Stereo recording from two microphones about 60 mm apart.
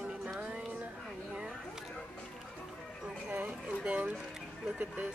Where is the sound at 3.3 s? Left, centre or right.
Right.